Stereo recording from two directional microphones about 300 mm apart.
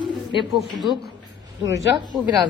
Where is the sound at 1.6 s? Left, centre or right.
Centre.